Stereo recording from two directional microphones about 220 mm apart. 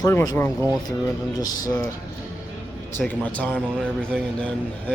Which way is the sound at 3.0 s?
5° left (ahead or behind).